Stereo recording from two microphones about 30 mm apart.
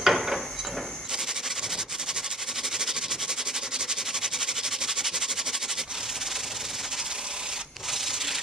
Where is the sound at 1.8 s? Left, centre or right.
Centre.